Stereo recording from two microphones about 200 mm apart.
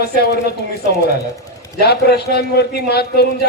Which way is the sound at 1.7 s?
55° left (ahead or behind).